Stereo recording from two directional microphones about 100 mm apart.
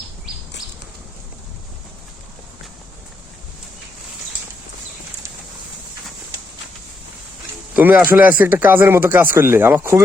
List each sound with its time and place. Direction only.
7.7 s a man's voice: 15° right (ahead or behind)